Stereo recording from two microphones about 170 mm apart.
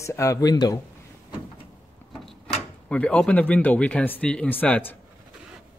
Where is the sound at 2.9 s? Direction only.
5° left (ahead or behind).